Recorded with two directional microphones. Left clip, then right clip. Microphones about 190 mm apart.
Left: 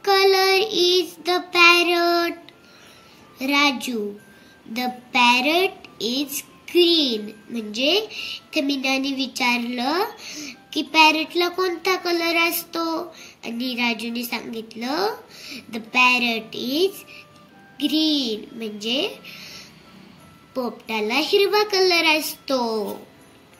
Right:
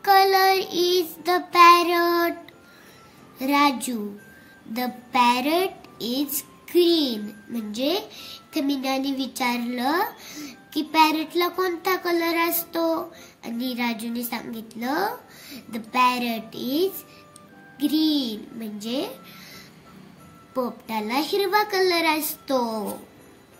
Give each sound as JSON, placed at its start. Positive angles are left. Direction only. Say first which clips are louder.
{"t": 0.0, "sound": "child singing", "louder": "even", "side_deg": -45}
{"t": 3.3, "sound": "a child's voice", "louder": "left 1 dB", "side_deg": -40}
{"t": 20.5, "sound": "a child's voice", "louder": "left 1 dB", "side_deg": -45}